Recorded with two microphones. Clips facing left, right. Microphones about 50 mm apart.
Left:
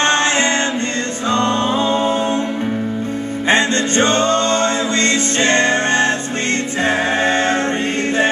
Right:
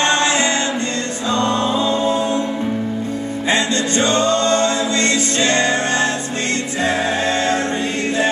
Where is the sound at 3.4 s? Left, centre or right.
Left.